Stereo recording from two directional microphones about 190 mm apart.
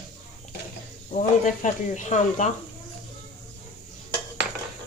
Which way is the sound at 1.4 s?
40° left (ahead or behind).